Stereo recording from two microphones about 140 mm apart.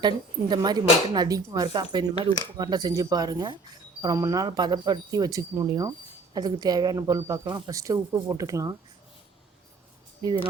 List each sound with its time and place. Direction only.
0.0 s speech: 30° right (ahead or behind)
10.2 s speech: 35° right (ahead or behind)